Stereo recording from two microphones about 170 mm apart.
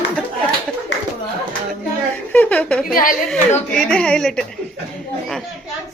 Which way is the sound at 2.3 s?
10° left (ahead or behind).